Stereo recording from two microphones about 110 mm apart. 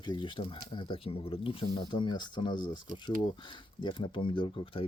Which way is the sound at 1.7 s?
45° left (ahead or behind).